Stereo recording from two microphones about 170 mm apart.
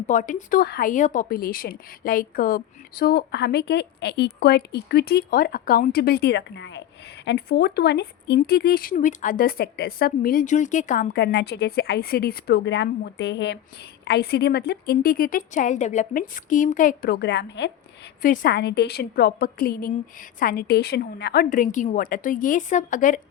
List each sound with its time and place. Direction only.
0.1 s speech: 50° left (ahead or behind); by 6.8 s 90° left
7.3 s speech: 70° left (ahead or behind); by 13.6 s 90° left
14.0 s speech: 70° left (ahead or behind); by 17.7 s 90° left
18.2 s speech: 55° left (ahead or behind)
21.5 s speech: 50° left (ahead or behind)